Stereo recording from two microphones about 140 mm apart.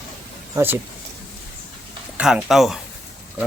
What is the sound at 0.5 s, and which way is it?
Speech, 15° right (ahead or behind).